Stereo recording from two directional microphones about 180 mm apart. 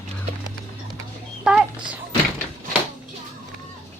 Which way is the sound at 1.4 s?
5° right (ahead or behind).